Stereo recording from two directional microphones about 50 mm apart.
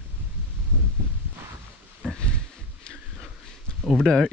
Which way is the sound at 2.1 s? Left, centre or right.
Centre.